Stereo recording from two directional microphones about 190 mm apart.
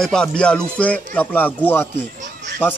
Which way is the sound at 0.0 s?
5° left (ahead or behind).